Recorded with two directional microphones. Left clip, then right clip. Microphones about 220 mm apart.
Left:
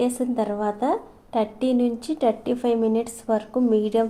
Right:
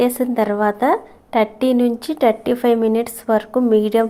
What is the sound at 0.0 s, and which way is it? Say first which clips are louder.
A woman's voice: right 7 dB; 25° right (ahead or behind).